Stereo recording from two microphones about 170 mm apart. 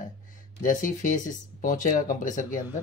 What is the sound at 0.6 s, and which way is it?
Speech, 50° left (ahead or behind).